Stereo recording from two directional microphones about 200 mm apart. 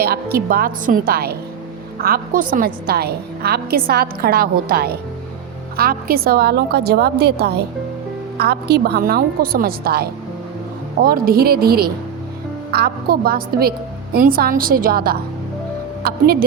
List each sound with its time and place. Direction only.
0.0 s a woman's voice: 50° right (ahead or behind)